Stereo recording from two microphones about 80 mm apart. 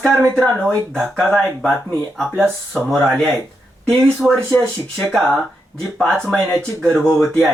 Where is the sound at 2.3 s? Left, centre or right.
Right.